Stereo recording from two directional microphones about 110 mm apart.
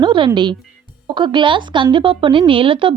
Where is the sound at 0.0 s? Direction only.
50° right (ahead or behind).